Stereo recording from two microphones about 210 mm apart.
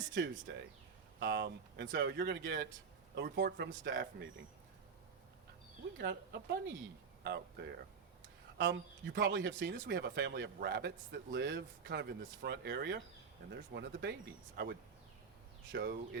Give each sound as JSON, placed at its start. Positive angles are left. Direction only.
{"t": 0.0, "sound": "speech", "side_deg": -60}
{"t": 6.0, "sound": "speech", "side_deg": -50}
{"t": 8.5, "sound": "speech", "side_deg": -55}